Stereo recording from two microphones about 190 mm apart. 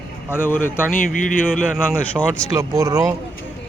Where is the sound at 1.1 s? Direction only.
45° left (ahead or behind).